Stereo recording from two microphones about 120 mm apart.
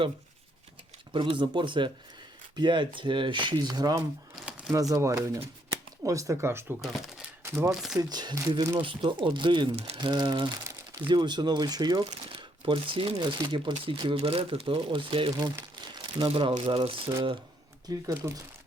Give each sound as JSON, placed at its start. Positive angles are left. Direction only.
{"t": 1.1, "sound": "speech", "side_deg": -45}
{"t": 6.8, "sound": "speech", "side_deg": 0}
{"t": 7.4, "sound": "speech", "side_deg": -25}
{"t": 7.9, "sound": "speech", "side_deg": -35}
{"t": 8.8, "sound": "speech", "side_deg": -45}
{"t": 15.9, "sound": "crumpling", "side_deg": -40}
{"t": 16.3, "sound": "speech", "side_deg": -45}
{"t": 17.8, "sound": "speech", "side_deg": -30}